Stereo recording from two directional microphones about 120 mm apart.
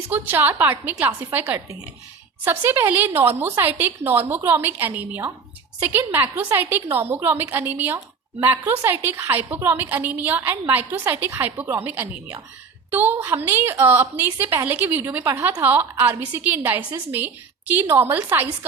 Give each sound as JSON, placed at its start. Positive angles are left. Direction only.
{"t": 0.1, "sound": "a woman's voice", "side_deg": -15}